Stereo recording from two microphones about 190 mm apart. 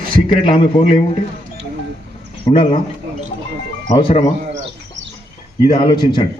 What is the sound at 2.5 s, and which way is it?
Speech, 30° left (ahead or behind).